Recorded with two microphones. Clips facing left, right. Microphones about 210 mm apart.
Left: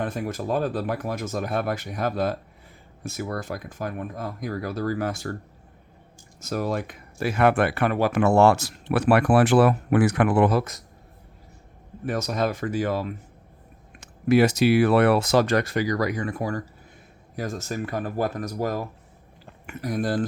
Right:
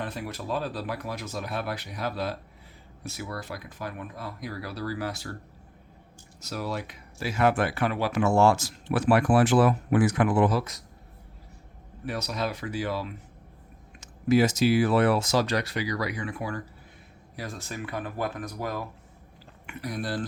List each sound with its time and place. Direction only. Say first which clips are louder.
0.0 s speech: left 6 dB; 50° left (ahead or behind)
6.4 s speech: left 6 dB; 50° left (ahead or behind)
12.0 s speech: left 6 dB; 50° left (ahead or behind)
14.0 s speech: left 3 dB; 60° left (ahead or behind); by 20.2 s 45° left (ahead or behind)